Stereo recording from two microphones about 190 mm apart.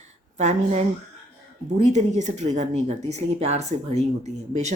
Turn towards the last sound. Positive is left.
turn(degrees=-35)  # may be behind; listen again after turning